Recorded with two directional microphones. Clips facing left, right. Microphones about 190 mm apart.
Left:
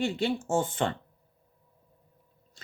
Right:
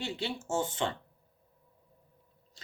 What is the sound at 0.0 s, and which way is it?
Speech, 50° left (ahead or behind).